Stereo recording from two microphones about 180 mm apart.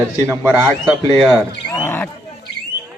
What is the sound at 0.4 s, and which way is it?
A man's voice, 5° left (ahead or behind).